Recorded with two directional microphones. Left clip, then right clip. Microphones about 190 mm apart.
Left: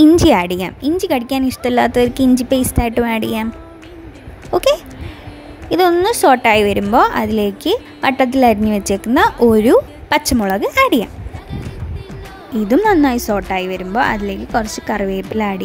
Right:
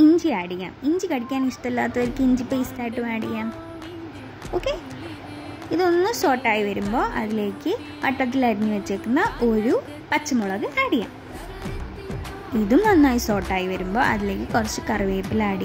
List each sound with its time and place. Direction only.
0.2 s a woman's voice: 65° left (ahead or behind)
4.5 s speech: 60° left (ahead or behind)
5.7 s a woman's voice: 50° left (ahead or behind); by 11.1 s 65° left (ahead or behind)
12.6 s a woman's voice: 50° left (ahead or behind)